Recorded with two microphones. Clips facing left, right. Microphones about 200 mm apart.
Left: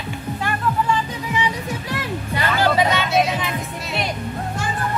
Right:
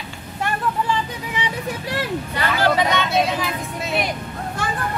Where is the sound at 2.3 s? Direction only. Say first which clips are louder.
Left 1 dB; 10° left (ahead or behind).